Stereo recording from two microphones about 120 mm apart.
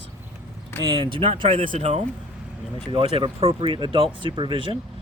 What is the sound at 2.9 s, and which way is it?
Speech, 50° right (ahead or behind).